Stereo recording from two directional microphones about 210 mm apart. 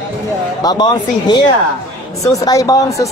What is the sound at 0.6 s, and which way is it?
A man's voice, 20° left (ahead or behind).